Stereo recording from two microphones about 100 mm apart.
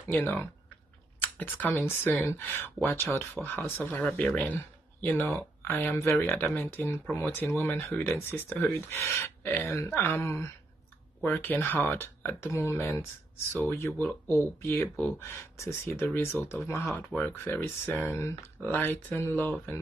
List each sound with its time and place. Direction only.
0.2 s speech: 20° left (ahead or behind)
16.9 s speech: 15° left (ahead or behind)